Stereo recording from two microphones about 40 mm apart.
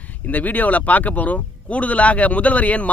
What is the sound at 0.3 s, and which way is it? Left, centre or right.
Speech, left.